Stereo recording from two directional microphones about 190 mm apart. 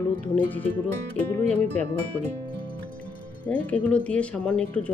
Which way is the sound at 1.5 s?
35° right (ahead or behind).